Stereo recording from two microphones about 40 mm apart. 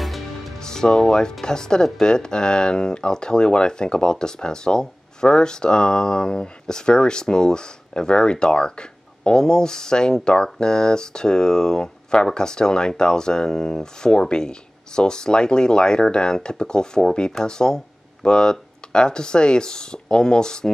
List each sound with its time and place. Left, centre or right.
0.6 s speech: centre